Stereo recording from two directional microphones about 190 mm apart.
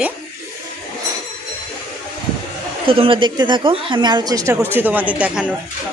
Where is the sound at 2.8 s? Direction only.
30° right (ahead or behind); by 5.4 s 5° right (ahead or behind).